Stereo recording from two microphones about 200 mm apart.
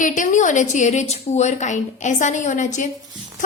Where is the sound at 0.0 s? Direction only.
40° left (ahead or behind).